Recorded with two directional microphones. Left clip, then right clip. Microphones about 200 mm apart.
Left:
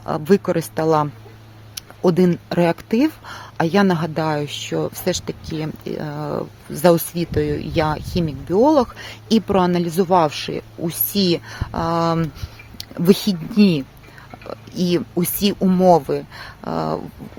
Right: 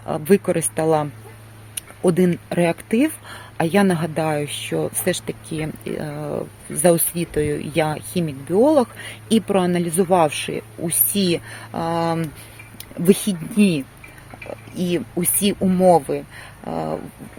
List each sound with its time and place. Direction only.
0.0 s speech: 10° left (ahead or behind)
2.0 s speech: 10° left (ahead or behind)